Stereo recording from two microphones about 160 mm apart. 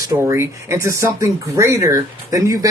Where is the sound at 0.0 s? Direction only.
20° right (ahead or behind).